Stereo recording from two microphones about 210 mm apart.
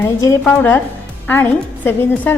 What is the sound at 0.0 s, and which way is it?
A woman's voice, 15° left (ahead or behind).